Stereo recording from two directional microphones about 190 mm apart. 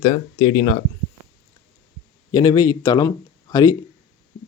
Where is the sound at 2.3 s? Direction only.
20° left (ahead or behind).